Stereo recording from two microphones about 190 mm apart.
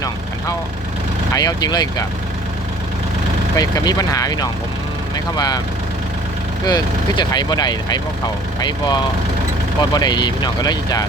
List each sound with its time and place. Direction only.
1.3 s speech: 20° left (ahead or behind)
3.5 s speech: 20° left (ahead or behind)
6.7 s speech: 20° left (ahead or behind)
9.9 s speech: 20° left (ahead or behind)